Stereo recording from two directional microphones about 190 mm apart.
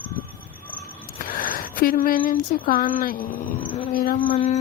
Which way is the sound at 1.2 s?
50° left (ahead or behind).